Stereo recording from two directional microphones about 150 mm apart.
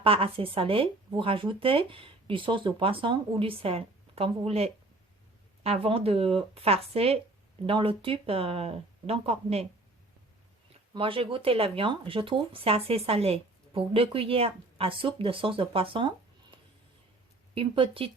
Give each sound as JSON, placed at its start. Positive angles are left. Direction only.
{"t": 0.0, "sound": "speech", "side_deg": -40}
{"t": 10.9, "sound": "speech", "side_deg": -35}
{"t": 17.5, "sound": "speech", "side_deg": -35}